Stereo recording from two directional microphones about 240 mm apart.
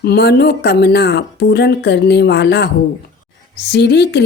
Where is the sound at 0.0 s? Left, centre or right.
Left.